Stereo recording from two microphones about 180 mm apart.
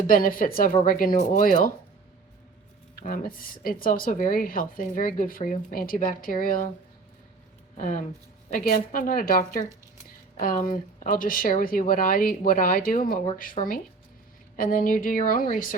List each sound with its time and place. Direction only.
0.1 s a woman's voice: 50° left (ahead or behind)
3.0 s a woman's voice: 50° left (ahead or behind)
7.8 s a woman's voice: 45° left (ahead or behind)